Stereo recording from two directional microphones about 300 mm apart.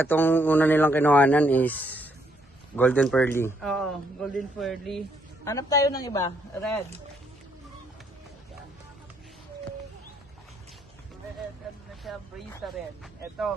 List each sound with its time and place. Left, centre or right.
0.0 s speech: centre
5.5 s a man's voice: centre
12.1 s speech: centre